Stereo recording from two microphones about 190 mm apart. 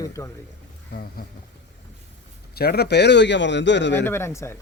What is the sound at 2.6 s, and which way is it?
Speech, 55° left (ahead or behind).